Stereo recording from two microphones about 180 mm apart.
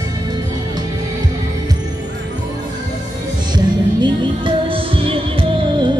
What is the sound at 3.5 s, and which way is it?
Music, 25° right (ahead or behind).